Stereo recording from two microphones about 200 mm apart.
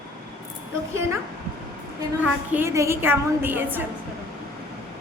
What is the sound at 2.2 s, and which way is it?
A woman's voice, 10° right (ahead or behind).